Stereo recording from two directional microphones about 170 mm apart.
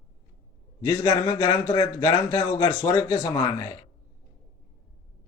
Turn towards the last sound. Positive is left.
turn(degrees=20)  # may be behind; listen again after turning